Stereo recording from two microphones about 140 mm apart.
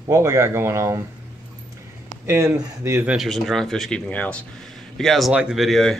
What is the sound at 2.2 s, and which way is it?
Speech, 20° right (ahead or behind).